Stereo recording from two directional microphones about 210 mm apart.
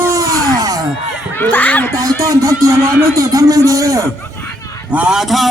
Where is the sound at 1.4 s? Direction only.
10° left (ahead or behind).